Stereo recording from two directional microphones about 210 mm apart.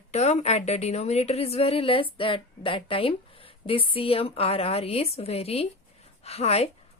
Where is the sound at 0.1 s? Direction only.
30° left (ahead or behind).